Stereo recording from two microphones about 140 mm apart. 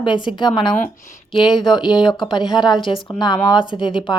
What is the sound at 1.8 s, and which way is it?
A woman's voice, 30° left (ahead or behind).